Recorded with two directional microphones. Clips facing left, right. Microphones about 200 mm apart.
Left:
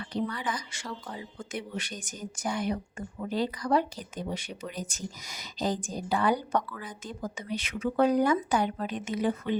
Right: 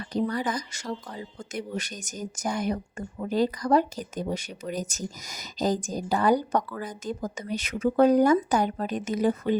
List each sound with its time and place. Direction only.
0.1 s speech: 40° right (ahead or behind)